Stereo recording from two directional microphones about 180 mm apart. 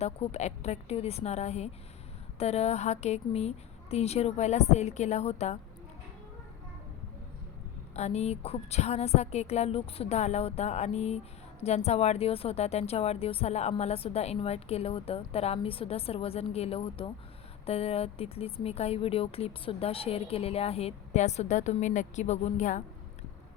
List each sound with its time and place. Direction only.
0.0 s a woman's voice: 35° left (ahead or behind)
7.9 s a woman's voice: 40° left (ahead or behind)